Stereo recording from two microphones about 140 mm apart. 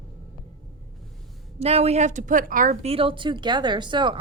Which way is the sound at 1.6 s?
50° right (ahead or behind).